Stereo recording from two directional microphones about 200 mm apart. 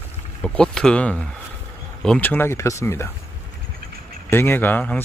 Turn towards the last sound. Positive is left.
turn(degrees=10)  # may be behind; listen again after turning